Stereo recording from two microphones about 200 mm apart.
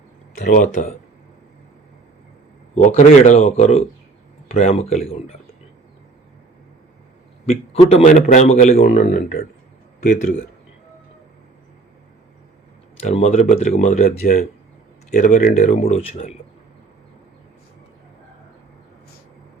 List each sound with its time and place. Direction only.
0.4 s speech: 40° left (ahead or behind)
2.7 s speech: 35° left (ahead or behind)
7.4 s a man's voice: 30° left (ahead or behind)
13.0 s speech: 35° left (ahead or behind)